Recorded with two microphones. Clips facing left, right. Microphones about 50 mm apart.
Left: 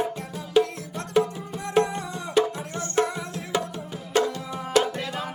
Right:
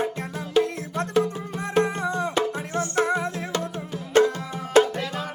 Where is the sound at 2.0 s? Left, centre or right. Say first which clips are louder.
Right 7 dB; right.